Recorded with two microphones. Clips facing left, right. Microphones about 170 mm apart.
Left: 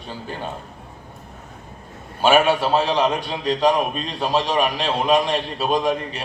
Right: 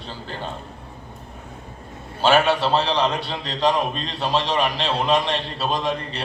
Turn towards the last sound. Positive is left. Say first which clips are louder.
# left 4 dB
turn(degrees=10)  # may be behind; listen again after turning